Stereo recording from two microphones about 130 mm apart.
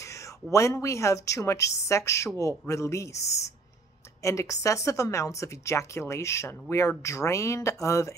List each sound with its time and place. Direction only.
0.0 s speech: 25° left (ahead or behind)